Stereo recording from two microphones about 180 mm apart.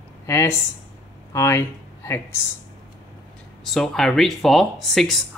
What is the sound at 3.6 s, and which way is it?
Speech, centre (ahead or behind).